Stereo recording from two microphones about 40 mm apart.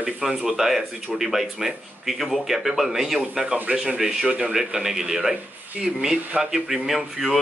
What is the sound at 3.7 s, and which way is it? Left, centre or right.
Speech, centre.